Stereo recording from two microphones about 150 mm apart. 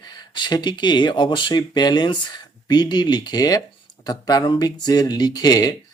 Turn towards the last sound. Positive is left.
turn(degrees=25)  # may be behind; listen again after turning